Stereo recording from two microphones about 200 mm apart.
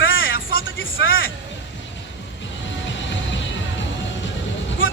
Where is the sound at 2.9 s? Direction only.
65° left (ahead or behind).